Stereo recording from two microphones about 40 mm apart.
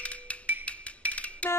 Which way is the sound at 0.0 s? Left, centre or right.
Left.